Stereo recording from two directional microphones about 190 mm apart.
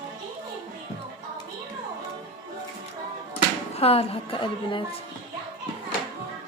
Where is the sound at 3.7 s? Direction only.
30° left (ahead or behind).